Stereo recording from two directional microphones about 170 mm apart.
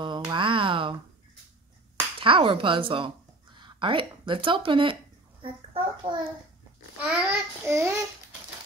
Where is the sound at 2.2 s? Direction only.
30° right (ahead or behind).